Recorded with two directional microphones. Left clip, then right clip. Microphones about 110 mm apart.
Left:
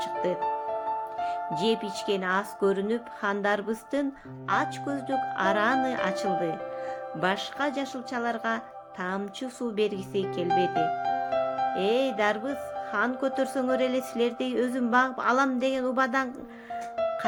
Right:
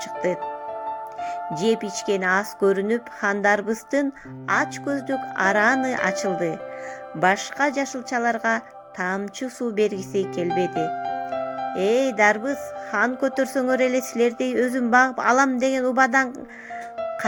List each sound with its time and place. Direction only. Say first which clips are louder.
0.4 s music: left 1 dB; centre (ahead or behind)
1.6 s a woman's voice: right 6 dB; 50° right (ahead or behind)
7.2 s a woman's voice: right 8 dB; 55° right (ahead or behind)
10.5 s music: left 1 dB; centre (ahead or behind)
11.7 s a woman's voice: right 5 dB; 50° right (ahead or behind)